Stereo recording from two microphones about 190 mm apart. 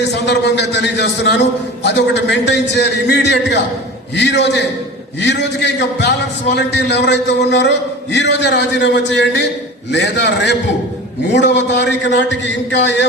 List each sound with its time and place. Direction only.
0.1 s a man's voice: 65° left (ahead or behind)